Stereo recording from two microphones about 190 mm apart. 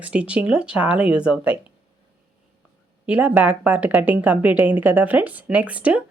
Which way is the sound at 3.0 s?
10° right (ahead or behind).